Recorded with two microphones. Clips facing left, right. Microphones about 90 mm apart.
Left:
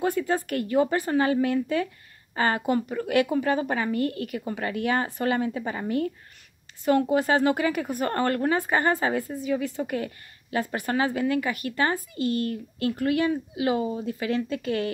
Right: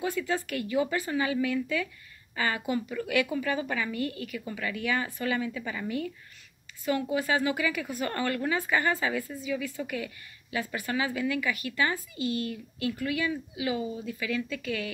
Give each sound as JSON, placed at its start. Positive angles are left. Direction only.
{"t": 0.0, "sound": "a woman's voice", "side_deg": 45}